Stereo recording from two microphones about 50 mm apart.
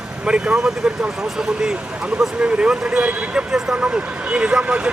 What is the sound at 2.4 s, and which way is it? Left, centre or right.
Speech, right.